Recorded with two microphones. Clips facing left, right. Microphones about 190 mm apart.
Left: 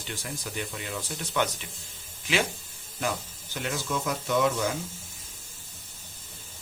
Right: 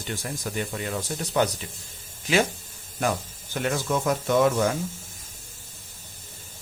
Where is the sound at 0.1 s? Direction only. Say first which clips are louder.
Right 5 dB; 45° right (ahead or behind).